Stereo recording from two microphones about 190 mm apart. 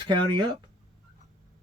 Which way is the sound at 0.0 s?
25° right (ahead or behind).